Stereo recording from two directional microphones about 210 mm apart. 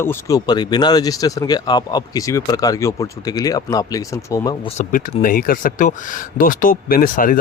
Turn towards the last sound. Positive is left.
turn(degrees=40)  # may be behind; listen again after turning